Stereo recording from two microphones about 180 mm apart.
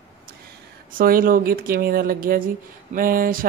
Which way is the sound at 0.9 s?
50° right (ahead or behind).